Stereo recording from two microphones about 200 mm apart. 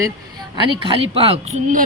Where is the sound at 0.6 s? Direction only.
25° right (ahead or behind).